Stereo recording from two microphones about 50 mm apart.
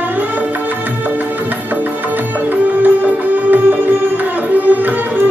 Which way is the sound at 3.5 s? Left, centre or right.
Right.